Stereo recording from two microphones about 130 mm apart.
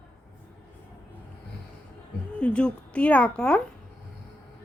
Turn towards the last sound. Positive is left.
turn(degrees=10)  # may be behind; listen again after turning